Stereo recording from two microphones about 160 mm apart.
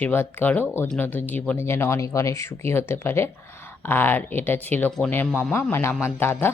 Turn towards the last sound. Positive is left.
turn(degrees=15)  # may be behind; listen again after turning